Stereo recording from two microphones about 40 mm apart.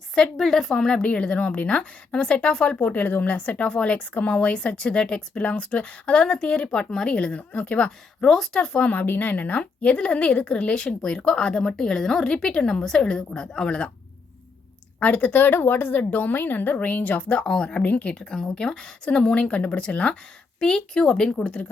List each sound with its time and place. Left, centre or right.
0.3 s a woman's voice: centre
1.0 s speech: left
2.8 s a woman's voice: left
3.7 s speech: left
5.4 s speech: left
6.7 s a woman's voice: centre
7.2 s a woman's voice: left
8.5 s speech: centre
8.8 s a woman's voice: left
9.3 s speech: left
14.9 s a woman's voice: left
17.4 s speech: left